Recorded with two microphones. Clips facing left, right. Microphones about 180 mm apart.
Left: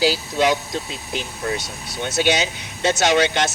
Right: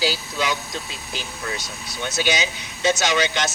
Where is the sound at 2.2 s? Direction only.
65° left (ahead or behind).